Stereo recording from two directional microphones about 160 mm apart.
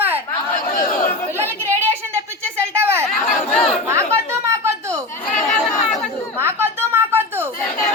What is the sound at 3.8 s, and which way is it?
Chatter, 15° right (ahead or behind).